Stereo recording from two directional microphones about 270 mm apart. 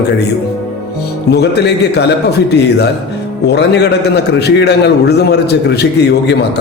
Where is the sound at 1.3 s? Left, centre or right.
Left.